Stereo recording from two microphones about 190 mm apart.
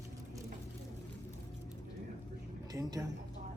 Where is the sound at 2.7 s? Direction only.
20° right (ahead or behind).